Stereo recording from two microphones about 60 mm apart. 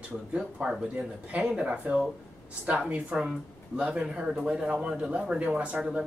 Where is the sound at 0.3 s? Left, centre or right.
Right.